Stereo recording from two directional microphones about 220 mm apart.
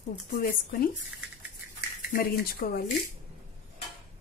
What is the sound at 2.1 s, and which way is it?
Speech, 40° left (ahead or behind).